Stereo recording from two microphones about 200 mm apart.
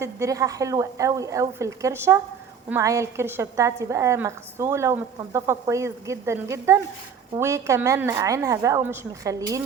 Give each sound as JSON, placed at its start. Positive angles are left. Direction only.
{"t": 0.0, "sound": "a woman's voice", "side_deg": -15}